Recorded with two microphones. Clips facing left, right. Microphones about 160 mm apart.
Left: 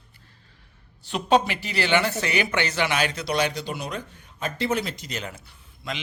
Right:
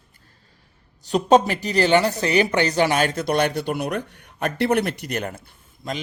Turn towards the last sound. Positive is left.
turn(degrees=-45)  # may be behind; listen again after turning